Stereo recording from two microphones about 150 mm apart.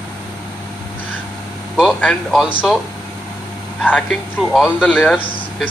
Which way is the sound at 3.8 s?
10° left (ahead or behind).